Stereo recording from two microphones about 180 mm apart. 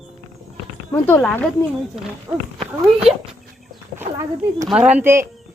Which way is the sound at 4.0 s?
15° right (ahead or behind).